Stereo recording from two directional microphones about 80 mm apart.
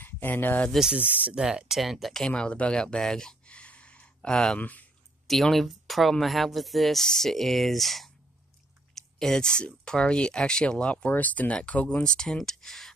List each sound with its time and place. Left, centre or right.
0.0 s speech: left
1.3 s speech: centre; by 4.8 s left
5.2 s speech: centre